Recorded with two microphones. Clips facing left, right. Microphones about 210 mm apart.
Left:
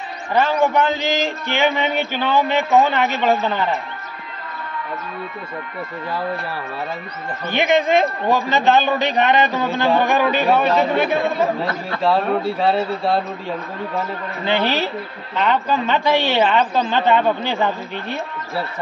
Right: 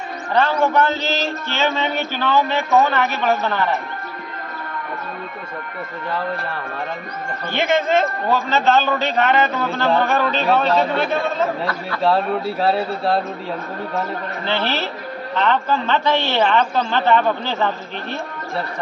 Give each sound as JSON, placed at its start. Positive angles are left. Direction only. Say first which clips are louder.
{"t": 0.3, "sound": "a man's voice", "louder": "left 1 dB", "side_deg": 15}
{"t": 7.5, "sound": "a man's voice", "louder": "left 2 dB", "side_deg": 15}
{"t": 12.0, "sound": "speech", "louder": "even", "side_deg": 0}
{"t": 14.4, "sound": "a man's voice", "louder": "left 4 dB", "side_deg": 15}